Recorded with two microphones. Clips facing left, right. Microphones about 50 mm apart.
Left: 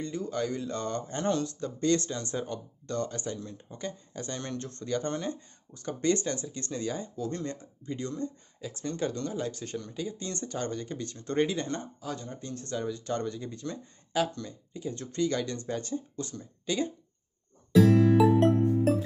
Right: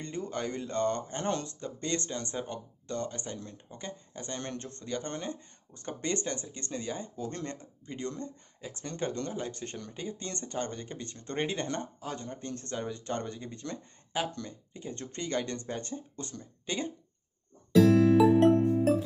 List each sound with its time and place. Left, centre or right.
0.0 s speech: right
11.5 s speech: right
18.1 s music: centre